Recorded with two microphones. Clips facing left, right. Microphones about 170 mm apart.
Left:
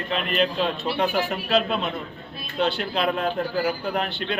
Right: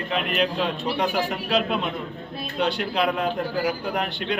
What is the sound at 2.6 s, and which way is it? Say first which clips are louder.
A man's voice: even; 10° right (ahead or behind).